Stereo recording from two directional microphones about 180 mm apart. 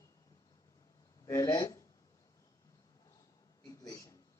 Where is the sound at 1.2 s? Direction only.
20° left (ahead or behind).